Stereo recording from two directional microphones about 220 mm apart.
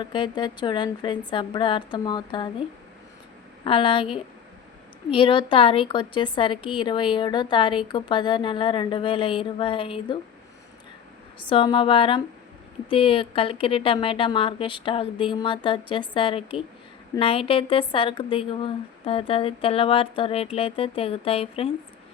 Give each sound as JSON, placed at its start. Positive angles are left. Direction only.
{"t": 0.0, "sound": "a woman's voice", "side_deg": 20}
{"t": 5.1, "sound": "a woman's voice", "side_deg": 25}
{"t": 11.3, "sound": "a woman's voice", "side_deg": 25}